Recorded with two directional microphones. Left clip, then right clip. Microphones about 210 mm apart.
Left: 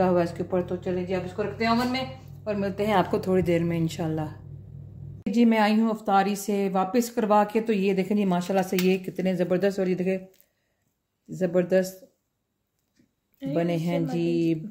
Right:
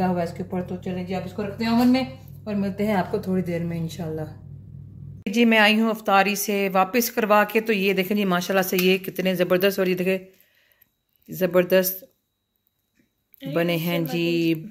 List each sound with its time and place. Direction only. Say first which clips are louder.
0.0 s speech: left 2 dB; 35° left (ahead or behind)
1.3 s speech: even; 25° left (ahead or behind); by 4.3 s 45° left (ahead or behind)
5.2 s a woman's voice: right 5 dB; 5° left (ahead or behind)
11.2 s a woman's voice: right 4 dB; centre (ahead or behind)
13.5 s a woman's voice: right 3 dB; centre (ahead or behind)